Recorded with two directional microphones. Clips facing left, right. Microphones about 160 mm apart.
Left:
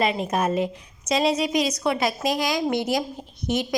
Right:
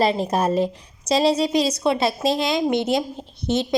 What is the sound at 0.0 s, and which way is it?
A woman's voice, 35° right (ahead or behind).